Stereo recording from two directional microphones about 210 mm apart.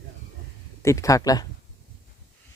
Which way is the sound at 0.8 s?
15° left (ahead or behind).